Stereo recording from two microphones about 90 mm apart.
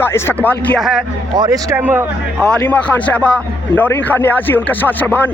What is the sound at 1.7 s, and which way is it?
Speech, 20° right (ahead or behind).